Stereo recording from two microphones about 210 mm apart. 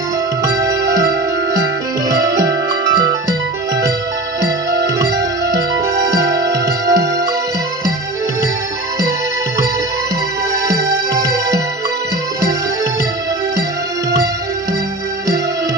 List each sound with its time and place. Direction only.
0.4 s music: 15° right (ahead or behind)
2.0 s music: 15° right (ahead or behind)
4.8 s music: 15° right (ahead or behind)
10.5 s music: 15° right (ahead or behind)